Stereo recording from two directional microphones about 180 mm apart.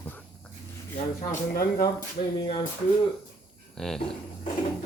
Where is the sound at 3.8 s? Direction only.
Centre (ahead or behind).